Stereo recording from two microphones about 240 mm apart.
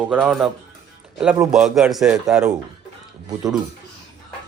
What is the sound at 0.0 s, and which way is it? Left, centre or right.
A man's voice, centre.